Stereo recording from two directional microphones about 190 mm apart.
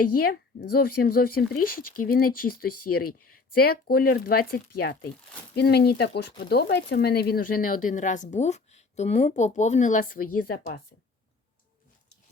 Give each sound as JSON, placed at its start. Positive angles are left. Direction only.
{"t": 0.2, "sound": "speech", "side_deg": 55}